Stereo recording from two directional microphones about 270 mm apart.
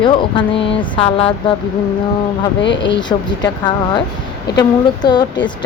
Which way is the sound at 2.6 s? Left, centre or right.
Left.